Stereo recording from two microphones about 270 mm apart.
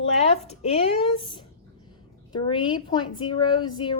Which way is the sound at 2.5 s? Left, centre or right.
Centre.